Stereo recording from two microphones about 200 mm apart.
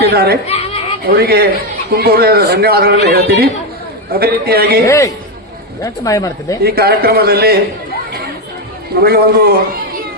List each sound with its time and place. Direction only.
0.0 s speech: 50° right (ahead or behind)
0.4 s children playing: 30° left (ahead or behind)
1.0 s speech: 50° right (ahead or behind)
4.9 s speech: 15° left (ahead or behind)
6.6 s speech: 50° right (ahead or behind)
9.0 s speech: 50° right (ahead or behind)